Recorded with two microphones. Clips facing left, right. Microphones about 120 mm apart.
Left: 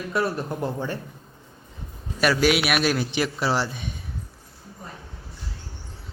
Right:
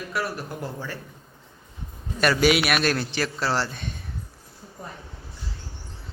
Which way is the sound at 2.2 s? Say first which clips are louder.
Even; centre (ahead or behind).